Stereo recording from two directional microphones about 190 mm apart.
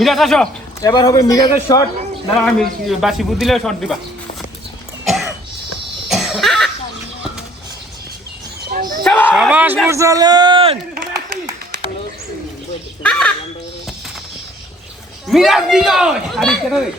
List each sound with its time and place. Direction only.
0.0 s a man's voice: centre (ahead or behind)
0.8 s a man's voice: 20° left (ahead or behind)
2.4 s a man's voice: 5° left (ahead or behind)
5.0 s throat clearing: centre (ahead or behind)
6.1 s cough: centre (ahead or behind)
9.0 s a sound: 10° left (ahead or behind)
9.3 s a man's voice: 5° right (ahead or behind); by 10.8 s 25° right (ahead or behind)
13.0 s a sound: 5° left (ahead or behind)
15.3 s a man's voice: centre (ahead or behind)